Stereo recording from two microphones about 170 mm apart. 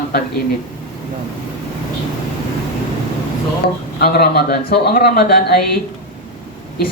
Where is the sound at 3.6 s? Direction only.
65° left (ahead or behind).